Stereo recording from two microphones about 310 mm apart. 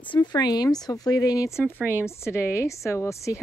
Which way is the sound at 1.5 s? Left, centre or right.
Centre.